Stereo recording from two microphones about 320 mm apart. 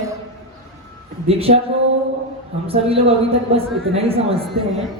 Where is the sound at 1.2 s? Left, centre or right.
Centre.